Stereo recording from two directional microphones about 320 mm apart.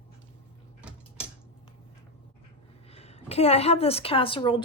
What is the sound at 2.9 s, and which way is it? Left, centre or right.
A woman's voice, centre.